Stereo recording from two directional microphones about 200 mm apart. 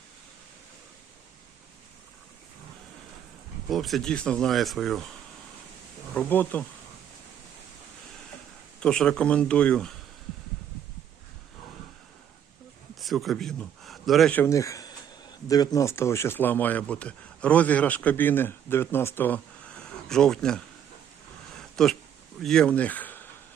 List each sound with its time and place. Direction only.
3.7 s speech: centre (ahead or behind)
6.1 s speech: 10° left (ahead or behind)
8.8 s speech: 5° left (ahead or behind)
13.0 s speech: centre (ahead or behind)
21.6 s a sound: centre (ahead or behind)
22.4 s speech: 5° left (ahead or behind)